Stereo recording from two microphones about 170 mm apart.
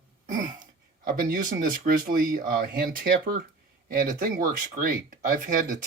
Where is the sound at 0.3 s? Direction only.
55° right (ahead or behind).